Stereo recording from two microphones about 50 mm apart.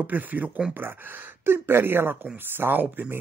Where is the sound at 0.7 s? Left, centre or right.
Right.